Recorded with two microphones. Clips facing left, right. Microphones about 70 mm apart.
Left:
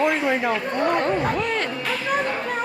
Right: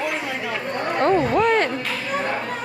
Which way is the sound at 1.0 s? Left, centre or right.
Right.